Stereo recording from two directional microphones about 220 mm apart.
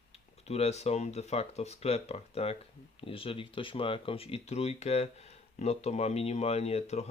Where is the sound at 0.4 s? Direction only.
30° left (ahead or behind).